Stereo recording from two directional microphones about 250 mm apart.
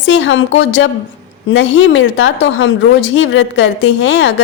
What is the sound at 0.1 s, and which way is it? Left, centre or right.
Speech, left.